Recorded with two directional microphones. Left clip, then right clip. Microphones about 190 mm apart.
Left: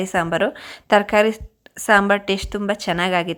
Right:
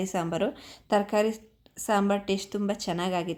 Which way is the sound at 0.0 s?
20° left (ahead or behind).